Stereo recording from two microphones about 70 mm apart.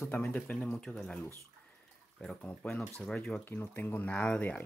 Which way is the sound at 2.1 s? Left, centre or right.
Centre.